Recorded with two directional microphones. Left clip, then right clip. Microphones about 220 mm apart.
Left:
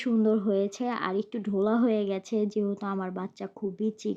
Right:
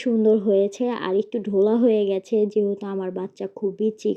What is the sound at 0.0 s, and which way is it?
Speech, centre (ahead or behind).